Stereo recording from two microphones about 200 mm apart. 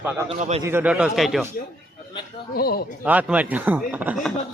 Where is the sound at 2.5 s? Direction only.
50° left (ahead or behind).